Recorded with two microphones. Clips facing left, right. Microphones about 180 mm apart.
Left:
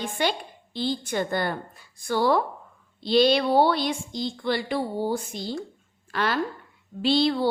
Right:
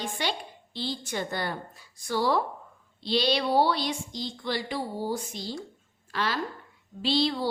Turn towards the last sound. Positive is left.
turn(degrees=55)  # may be behind; listen again after turning